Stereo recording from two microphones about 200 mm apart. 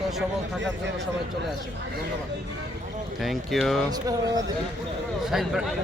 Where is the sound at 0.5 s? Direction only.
60° right (ahead or behind).